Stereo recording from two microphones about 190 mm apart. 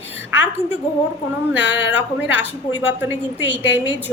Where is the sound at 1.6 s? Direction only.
70° left (ahead or behind).